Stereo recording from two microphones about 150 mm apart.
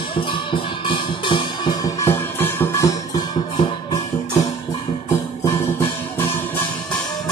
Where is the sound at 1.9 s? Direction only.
15° left (ahead or behind).